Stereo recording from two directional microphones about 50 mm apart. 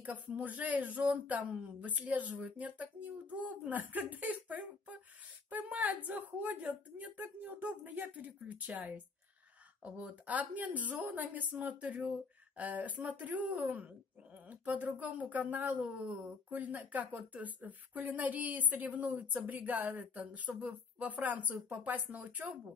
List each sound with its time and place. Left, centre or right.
0.0 s speech: right